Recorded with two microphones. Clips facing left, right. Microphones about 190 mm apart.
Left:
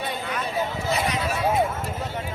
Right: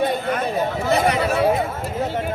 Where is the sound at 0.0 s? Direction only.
50° right (ahead or behind).